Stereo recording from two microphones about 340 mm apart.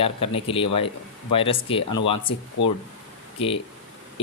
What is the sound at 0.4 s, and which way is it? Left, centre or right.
Speech, centre.